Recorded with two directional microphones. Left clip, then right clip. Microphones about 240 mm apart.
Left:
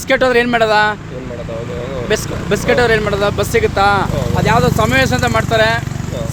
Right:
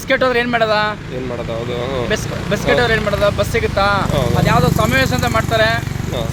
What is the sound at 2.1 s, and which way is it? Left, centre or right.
Speech, left.